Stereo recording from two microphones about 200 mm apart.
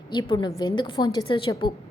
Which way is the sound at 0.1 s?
25° left (ahead or behind).